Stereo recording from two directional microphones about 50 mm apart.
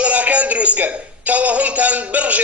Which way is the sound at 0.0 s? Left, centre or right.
Right.